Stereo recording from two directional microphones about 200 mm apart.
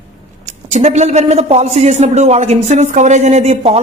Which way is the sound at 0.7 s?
35° right (ahead or behind).